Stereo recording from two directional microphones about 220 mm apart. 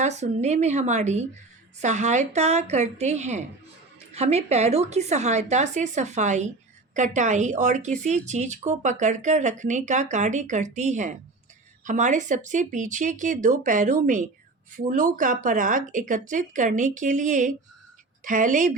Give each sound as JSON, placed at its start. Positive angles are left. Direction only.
{"t": 0.0, "sound": "a woman's voice", "side_deg": -30}